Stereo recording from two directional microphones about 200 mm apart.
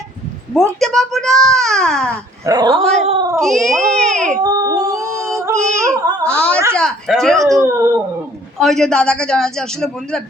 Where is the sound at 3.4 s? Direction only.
Centre (ahead or behind).